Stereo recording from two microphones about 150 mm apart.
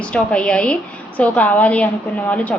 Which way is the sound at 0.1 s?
5° left (ahead or behind).